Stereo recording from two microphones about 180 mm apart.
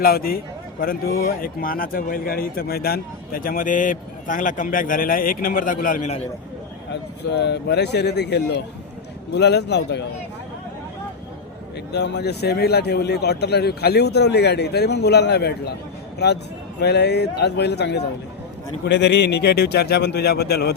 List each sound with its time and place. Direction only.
0.0 s a man's voice: 55° left (ahead or behind)
6.9 s speech: 70° left (ahead or behind)
11.9 s speech: 70° left (ahead or behind)